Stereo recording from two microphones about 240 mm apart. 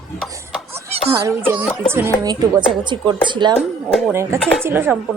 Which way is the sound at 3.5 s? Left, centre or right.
Centre.